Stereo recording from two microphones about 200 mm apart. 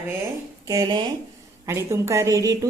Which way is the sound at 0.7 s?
20° right (ahead or behind).